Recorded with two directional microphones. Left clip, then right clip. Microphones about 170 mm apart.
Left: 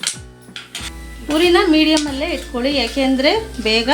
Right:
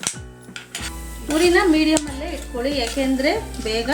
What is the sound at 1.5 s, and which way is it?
A woman's voice, 55° left (ahead or behind).